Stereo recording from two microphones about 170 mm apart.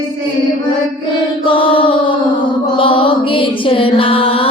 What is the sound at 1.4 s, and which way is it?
Music, 30° left (ahead or behind).